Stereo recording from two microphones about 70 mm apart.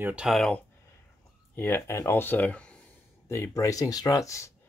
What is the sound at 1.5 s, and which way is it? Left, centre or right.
Speech, left.